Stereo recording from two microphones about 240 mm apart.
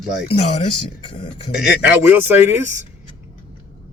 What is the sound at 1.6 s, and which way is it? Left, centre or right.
Speech, centre.